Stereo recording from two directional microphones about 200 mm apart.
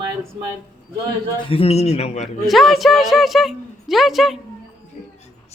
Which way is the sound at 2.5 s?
Centre (ahead or behind).